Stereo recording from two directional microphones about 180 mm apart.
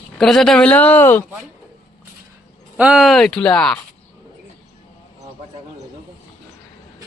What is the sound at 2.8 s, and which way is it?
Speech, 5° right (ahead or behind).